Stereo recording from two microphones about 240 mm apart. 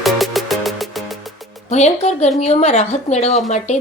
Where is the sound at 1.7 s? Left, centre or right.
Left.